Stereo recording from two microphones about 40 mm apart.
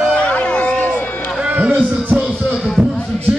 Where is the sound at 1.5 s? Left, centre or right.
Right.